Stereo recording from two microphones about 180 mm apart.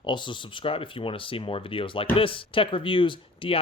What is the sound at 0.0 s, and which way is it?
Speech, 25° left (ahead or behind).